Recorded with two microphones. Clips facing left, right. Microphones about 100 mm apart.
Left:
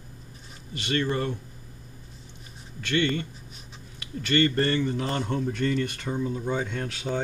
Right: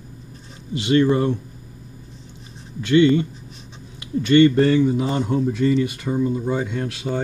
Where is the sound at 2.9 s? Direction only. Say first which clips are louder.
Right 11 dB; 15° right (ahead or behind).